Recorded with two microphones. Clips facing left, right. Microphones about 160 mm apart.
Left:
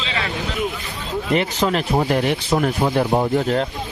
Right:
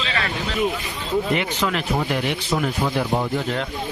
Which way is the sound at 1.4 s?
35° left (ahead or behind).